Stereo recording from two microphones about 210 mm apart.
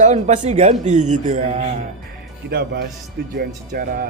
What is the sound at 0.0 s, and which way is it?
Speech, 35° right (ahead or behind).